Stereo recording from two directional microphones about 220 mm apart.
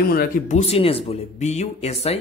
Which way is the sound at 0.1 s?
40° left (ahead or behind).